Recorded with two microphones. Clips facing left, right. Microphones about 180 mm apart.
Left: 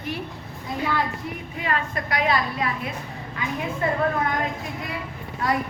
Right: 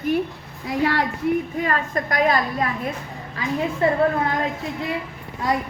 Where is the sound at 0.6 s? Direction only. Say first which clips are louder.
Right 4 dB; 80° right.